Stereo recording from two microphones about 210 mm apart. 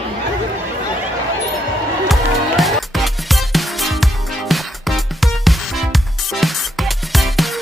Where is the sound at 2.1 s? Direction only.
Centre (ahead or behind).